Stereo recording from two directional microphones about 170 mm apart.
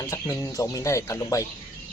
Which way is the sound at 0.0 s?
15° left (ahead or behind).